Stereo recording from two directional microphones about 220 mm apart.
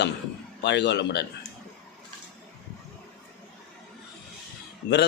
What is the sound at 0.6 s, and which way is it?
Speech, 50° left (ahead or behind).